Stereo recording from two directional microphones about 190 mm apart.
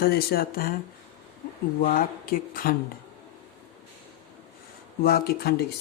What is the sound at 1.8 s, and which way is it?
Speech, 50° left (ahead or behind).